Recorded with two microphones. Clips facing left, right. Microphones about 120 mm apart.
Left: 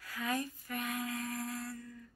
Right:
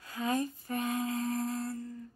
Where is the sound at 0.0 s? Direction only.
25° right (ahead or behind).